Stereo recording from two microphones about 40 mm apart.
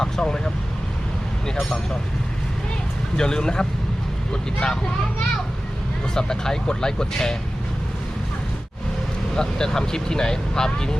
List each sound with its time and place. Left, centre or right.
0.0 s speech: centre
1.5 s speech: centre
3.2 s speech: centre
6.1 s speech: centre
9.3 s speech: centre